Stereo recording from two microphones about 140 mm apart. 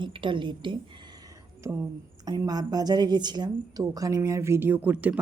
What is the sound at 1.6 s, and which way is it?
Speech, 20° right (ahead or behind).